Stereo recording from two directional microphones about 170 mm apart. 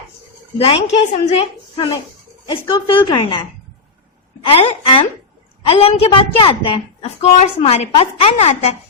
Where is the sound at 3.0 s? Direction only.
25° left (ahead or behind).